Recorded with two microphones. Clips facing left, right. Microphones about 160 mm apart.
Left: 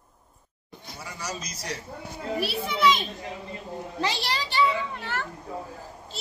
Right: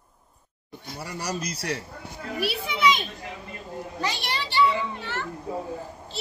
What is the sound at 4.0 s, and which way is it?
Speech, 30° left (ahead or behind).